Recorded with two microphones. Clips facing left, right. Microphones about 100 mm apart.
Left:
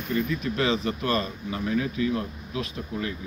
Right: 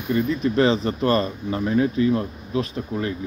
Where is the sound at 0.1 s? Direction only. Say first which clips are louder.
Right 6 dB; 35° right (ahead or behind).